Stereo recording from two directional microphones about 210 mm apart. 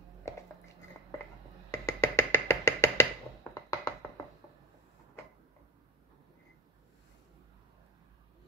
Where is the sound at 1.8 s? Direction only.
10° left (ahead or behind).